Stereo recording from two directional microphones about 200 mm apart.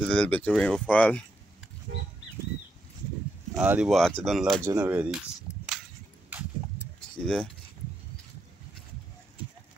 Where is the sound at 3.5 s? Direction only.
5° right (ahead or behind).